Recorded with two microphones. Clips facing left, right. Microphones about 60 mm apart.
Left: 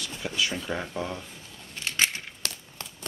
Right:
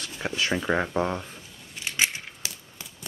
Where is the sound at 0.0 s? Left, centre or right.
Right.